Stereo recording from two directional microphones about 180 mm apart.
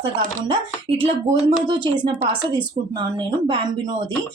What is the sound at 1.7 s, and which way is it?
A woman's voice, 25° right (ahead or behind).